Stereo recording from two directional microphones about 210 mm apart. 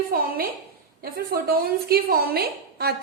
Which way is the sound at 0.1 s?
45° right (ahead or behind).